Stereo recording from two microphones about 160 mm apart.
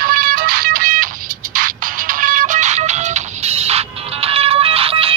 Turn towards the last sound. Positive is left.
turn(degrees=-35)  # may be behind; listen again after turning